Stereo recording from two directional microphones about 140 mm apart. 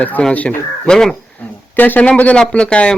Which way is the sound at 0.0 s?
10° left (ahead or behind).